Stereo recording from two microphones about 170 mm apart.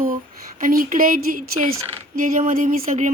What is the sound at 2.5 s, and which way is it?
Speech, 50° right (ahead or behind).